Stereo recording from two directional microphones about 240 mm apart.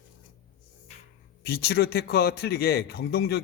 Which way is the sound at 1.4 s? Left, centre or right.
Left.